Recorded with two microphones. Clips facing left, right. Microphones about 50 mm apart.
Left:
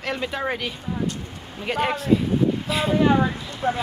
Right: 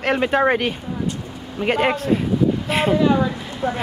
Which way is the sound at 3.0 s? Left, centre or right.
Left.